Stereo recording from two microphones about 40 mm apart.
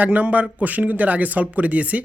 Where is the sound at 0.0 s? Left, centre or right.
Right.